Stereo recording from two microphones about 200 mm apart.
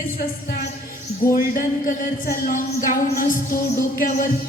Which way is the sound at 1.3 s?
45° left (ahead or behind).